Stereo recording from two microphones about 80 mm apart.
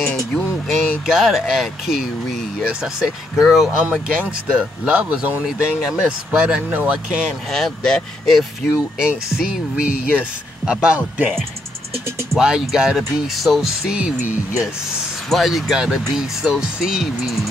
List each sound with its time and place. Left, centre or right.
0.7 s speech: centre
3.3 s speech: centre
7.5 s speech: centre
8.7 s speech: centre
12.4 s speech: centre
15.2 s speech: centre